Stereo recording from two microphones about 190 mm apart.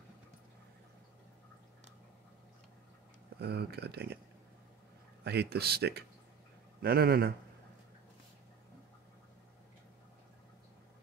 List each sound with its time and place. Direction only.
3.3 s speech: 60° right (ahead or behind)
5.2 s a man's voice: 60° right (ahead or behind)